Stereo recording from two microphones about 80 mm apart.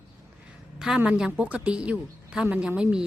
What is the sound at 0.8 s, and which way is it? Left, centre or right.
A woman's voice, centre.